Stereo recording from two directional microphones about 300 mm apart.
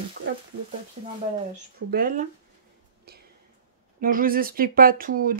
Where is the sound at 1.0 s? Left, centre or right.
Right.